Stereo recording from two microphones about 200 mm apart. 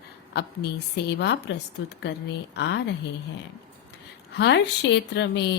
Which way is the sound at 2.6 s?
60° left (ahead or behind).